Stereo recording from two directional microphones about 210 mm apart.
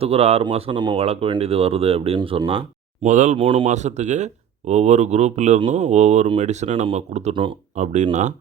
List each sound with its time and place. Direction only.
0.0 s speech: 30° right (ahead or behind)